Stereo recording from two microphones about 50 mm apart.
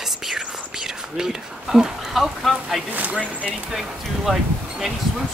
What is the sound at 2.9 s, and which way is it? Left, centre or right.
Speech, right.